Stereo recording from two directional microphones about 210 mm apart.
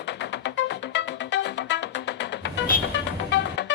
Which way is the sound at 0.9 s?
55° left (ahead or behind).